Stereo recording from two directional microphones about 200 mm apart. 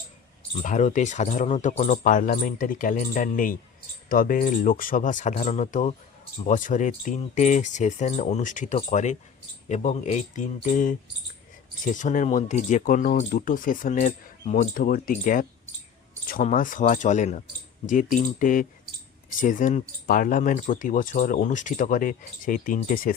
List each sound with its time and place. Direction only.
0.6 s speech: 35° left (ahead or behind)